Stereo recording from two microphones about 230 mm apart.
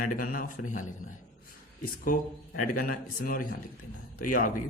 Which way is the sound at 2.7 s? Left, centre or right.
Left.